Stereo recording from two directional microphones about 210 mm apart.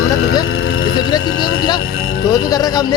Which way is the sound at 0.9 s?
20° left (ahead or behind).